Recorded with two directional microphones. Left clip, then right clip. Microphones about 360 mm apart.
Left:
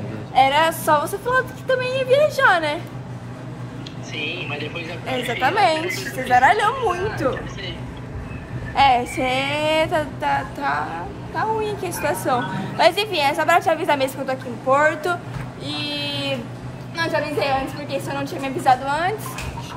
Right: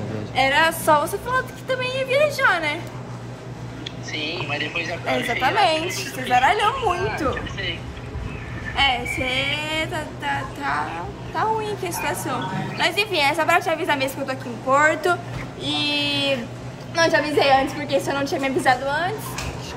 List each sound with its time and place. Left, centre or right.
0.3 s a woman's voice: centre
4.5 s a woman's voice: centre
8.7 s a woman's voice: centre
15.6 s a sound: centre
16.9 s a woman's voice: centre
18.9 s a woman's voice: centre